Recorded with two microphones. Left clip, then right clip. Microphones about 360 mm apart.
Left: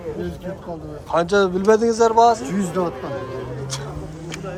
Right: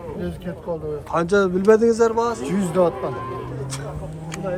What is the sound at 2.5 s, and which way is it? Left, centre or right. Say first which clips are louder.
Speech: right 4 dB; right.